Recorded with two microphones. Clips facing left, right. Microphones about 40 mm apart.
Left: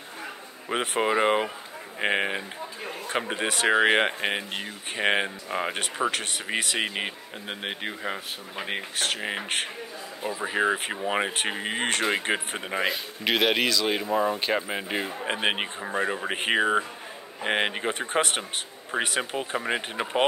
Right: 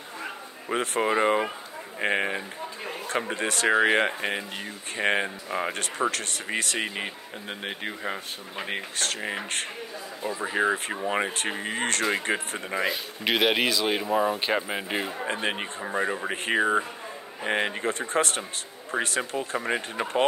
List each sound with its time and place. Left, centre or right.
0.7 s speech: centre
12.9 s speech: centre
15.4 s speech: left
15.8 s speech: centre
17.5 s speech: left
19.5 s speech: centre